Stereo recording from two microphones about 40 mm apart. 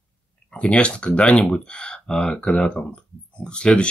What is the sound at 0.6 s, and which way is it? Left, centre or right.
Speech, left.